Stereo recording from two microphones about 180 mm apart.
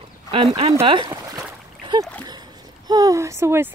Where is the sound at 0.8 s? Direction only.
25° right (ahead or behind).